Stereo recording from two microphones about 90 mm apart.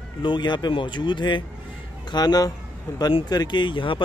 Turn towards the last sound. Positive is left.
turn(degrees=65)  # may be behind; listen again after turning